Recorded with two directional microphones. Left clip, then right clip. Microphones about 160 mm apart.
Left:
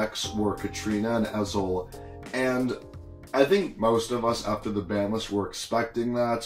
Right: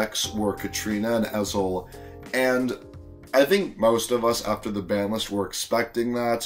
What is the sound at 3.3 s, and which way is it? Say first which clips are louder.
Speech: right 2 dB; 15° right (ahead or behind).